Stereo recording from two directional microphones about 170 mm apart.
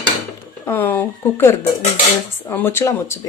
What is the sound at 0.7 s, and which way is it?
Speech, 10° left (ahead or behind).